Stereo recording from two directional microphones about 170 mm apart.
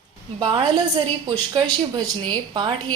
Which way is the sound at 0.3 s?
25° right (ahead or behind).